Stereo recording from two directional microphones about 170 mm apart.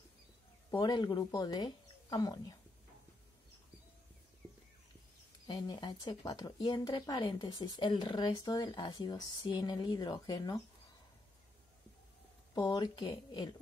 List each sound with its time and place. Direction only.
0.7 s speech: 25° left (ahead or behind)
5.5 s speech: 25° left (ahead or behind)
12.5 s speech: 25° left (ahead or behind)